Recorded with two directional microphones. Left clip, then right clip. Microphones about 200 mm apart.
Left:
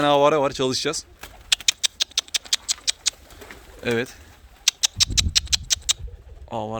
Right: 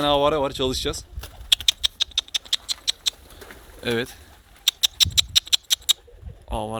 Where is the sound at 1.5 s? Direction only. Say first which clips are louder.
Right 2 dB; 10° left (ahead or behind).